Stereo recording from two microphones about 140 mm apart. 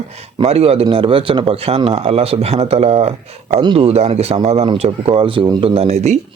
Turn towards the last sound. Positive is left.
turn(degrees=-55)  # may be behind; listen again after turning